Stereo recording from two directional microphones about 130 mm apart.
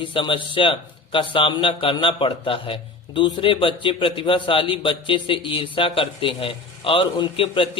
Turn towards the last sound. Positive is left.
turn(degrees=45)  # may be behind; listen again after turning